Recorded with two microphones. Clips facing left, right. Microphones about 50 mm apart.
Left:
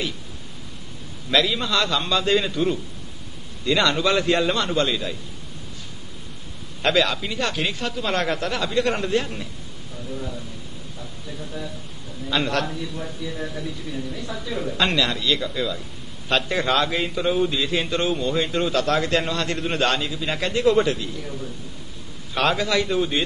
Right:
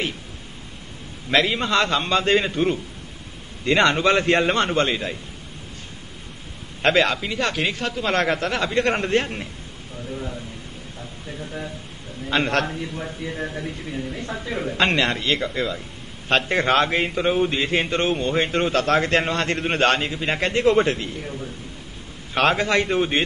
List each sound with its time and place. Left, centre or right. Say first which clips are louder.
1.3 s a man's voice: right 2 dB; right
6.8 s a man's voice: right 2 dB; right
7.4 s a man's voice: right 2 dB; right
11.0 s a man's voice: right 1 dB; right
22.3 s a man's voice: right 2 dB; right